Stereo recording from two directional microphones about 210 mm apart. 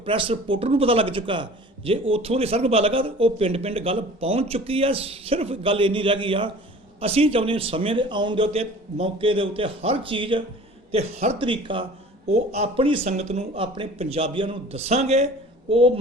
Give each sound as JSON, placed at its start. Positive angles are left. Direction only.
{"t": 0.0, "sound": "a man's voice", "side_deg": -25}